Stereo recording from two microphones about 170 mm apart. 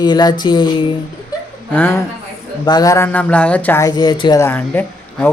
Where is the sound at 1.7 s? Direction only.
15° left (ahead or behind).